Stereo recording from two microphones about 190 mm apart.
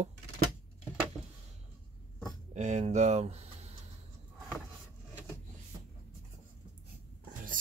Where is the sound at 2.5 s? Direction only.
35° right (ahead or behind).